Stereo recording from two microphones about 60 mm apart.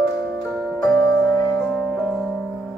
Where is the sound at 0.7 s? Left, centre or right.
Centre.